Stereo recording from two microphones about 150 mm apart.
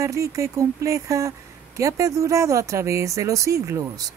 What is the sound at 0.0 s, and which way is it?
Speech, 20° right (ahead or behind).